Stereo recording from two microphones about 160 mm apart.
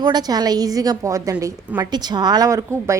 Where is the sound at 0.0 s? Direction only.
25° right (ahead or behind).